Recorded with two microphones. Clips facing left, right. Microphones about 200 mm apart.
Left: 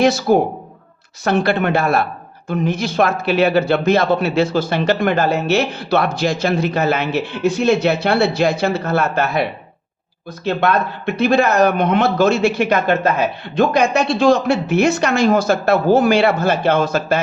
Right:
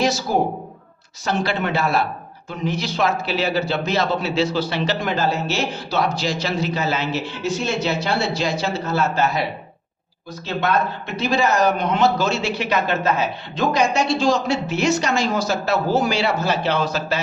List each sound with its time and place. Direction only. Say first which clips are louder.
0.0 s a man's voice: left 6 dB; 60° left (ahead or behind)